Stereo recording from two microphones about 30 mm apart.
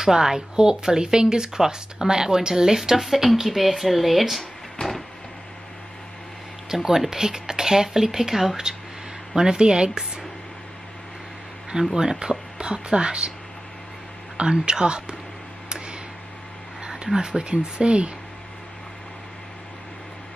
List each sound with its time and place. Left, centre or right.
0.0 s speech: centre
3.0 s speech: centre
6.7 s speech: centre
11.9 s speech: centre
14.3 s a sound: right
14.7 s speech: right
16.8 s speech: right